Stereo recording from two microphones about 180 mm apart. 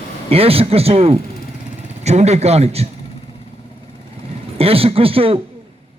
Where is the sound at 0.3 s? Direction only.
35° right (ahead or behind).